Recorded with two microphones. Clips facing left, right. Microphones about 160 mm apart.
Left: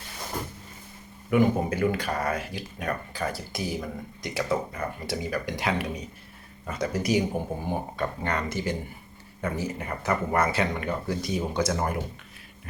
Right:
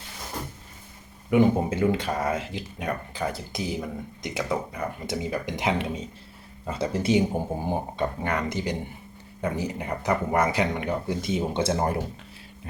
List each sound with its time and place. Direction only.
1.3 s speech: 25° right (ahead or behind)
8.0 s speech: 10° right (ahead or behind); by 11.9 s 30° right (ahead or behind)